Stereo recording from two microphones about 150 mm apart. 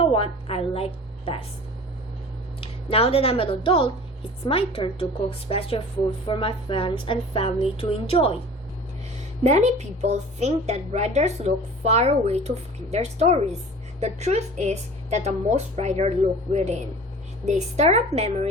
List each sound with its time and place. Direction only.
0.0 s a woman's voice: 40° left (ahead or behind)
2.6 s a woman's voice: 40° left (ahead or behind)
9.4 s a woman's voice: 50° right (ahead or behind)